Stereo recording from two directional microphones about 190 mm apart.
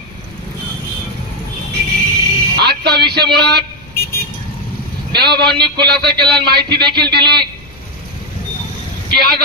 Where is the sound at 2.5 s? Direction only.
60° right (ahead or behind).